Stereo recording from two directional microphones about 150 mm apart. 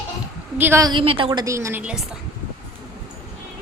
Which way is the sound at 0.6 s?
15° right (ahead or behind).